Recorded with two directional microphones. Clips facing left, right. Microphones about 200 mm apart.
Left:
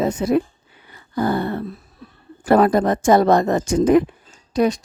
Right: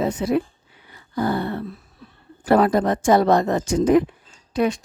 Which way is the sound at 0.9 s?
45° left (ahead or behind).